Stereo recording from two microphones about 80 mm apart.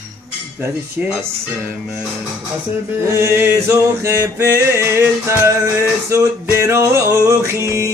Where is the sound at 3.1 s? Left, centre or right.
Right.